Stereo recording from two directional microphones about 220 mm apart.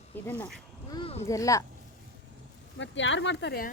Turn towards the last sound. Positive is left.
turn(degrees=50)  # may be behind; listen again after turning